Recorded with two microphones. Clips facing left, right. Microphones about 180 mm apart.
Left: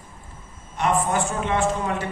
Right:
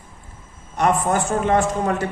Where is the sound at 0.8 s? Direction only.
45° right (ahead or behind).